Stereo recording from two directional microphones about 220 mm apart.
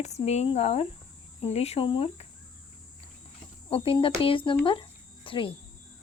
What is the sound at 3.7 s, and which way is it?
Speech, 25° left (ahead or behind).